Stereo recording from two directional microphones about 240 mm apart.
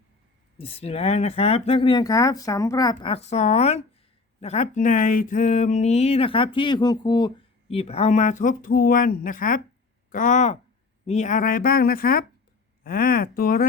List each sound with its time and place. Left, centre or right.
0.6 s a woman's voice: left